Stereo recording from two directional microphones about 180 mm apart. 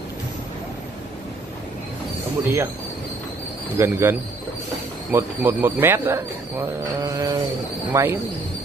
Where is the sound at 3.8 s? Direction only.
15° right (ahead or behind).